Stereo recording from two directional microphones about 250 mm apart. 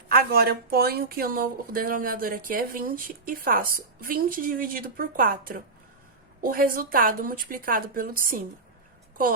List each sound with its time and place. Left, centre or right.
0.1 s speech: right